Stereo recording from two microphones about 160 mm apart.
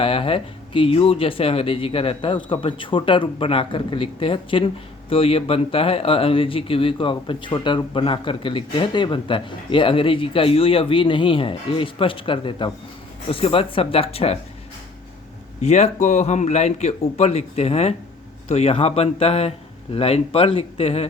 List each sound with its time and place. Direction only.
0.0 s speech: 35° left (ahead or behind)
15.6 s a man's voice: 45° left (ahead or behind)